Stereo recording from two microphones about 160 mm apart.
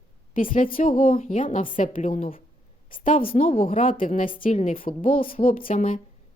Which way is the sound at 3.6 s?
55° left (ahead or behind).